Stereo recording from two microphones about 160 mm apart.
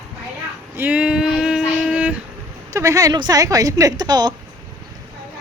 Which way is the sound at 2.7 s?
20° right (ahead or behind).